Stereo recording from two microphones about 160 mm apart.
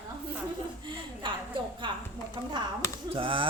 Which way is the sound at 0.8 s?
30° right (ahead or behind).